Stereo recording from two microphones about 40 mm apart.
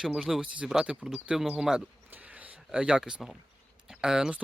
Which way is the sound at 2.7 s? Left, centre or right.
Right.